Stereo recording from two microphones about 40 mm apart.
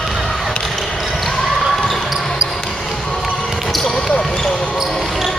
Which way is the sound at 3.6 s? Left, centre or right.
Centre.